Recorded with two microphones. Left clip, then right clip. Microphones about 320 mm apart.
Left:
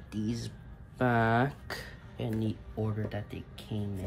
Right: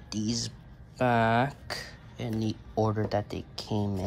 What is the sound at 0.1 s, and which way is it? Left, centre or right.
Speech, centre.